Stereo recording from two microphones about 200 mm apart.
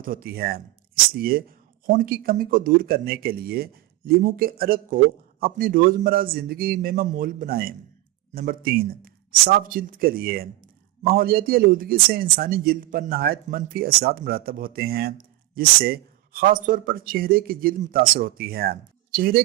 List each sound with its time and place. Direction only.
0.0 s speech: 45° right (ahead or behind)